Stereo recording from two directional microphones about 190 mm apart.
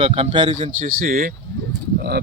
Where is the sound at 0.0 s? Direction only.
25° right (ahead or behind).